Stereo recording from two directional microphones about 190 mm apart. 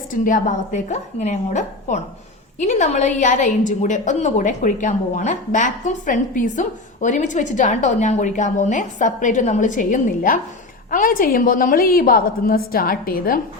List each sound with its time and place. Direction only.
0.1 s a woman's voice: 45° left (ahead or behind)